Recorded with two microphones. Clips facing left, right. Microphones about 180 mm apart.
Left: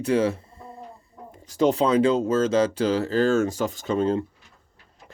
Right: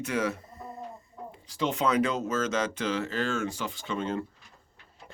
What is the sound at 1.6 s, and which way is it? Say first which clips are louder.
Speech: left 7 dB; 35° left (ahead or behind).